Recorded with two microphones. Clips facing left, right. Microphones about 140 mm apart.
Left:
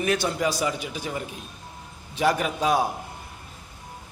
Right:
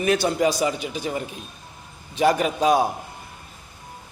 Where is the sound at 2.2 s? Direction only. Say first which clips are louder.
Right 4 dB; 15° right (ahead or behind).